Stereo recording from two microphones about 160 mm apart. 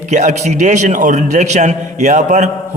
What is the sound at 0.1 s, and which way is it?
A man's voice, 50° right (ahead or behind).